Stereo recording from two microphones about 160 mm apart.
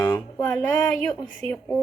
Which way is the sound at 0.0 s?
20° left (ahead or behind).